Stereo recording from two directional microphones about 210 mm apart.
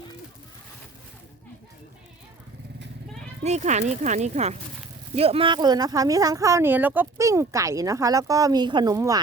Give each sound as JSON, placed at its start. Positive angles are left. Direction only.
{"t": 3.4, "sound": "speech", "side_deg": -35}